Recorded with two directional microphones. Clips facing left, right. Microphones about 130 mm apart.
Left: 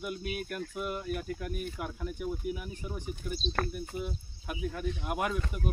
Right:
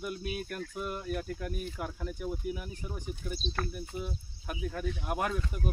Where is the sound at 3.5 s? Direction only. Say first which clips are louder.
Left 4 dB; 50° left (ahead or behind).